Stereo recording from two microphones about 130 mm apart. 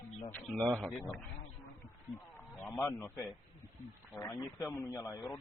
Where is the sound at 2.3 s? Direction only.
15° left (ahead or behind).